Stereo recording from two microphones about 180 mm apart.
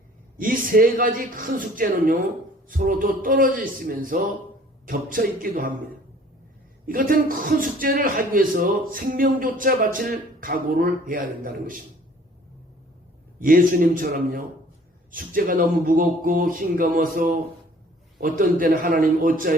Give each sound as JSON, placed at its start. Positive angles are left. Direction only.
{"t": 0.3, "sound": "speech", "side_deg": -50}
{"t": 6.8, "sound": "speech", "side_deg": -50}
{"t": 13.4, "sound": "speech", "side_deg": -50}